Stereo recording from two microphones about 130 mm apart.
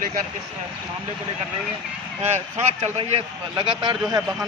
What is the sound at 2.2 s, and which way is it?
Speech, 60° right (ahead or behind).